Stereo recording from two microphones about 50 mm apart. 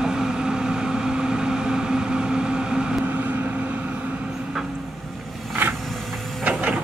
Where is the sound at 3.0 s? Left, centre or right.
Right.